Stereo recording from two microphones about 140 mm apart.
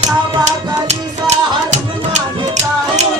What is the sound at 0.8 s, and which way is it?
Music, 55° right (ahead or behind).